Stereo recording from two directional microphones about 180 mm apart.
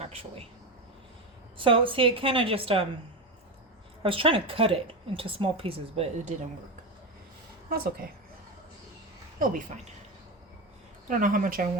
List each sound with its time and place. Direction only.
0.0 s speech: 35° right (ahead or behind)
1.5 s a woman's voice: 30° right (ahead or behind)
4.0 s a woman's voice: 30° right (ahead or behind)
9.4 s speech: 45° right (ahead or behind)
11.1 s speech: 50° right (ahead or behind)